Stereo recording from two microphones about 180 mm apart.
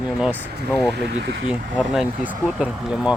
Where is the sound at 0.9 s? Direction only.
70° right (ahead or behind).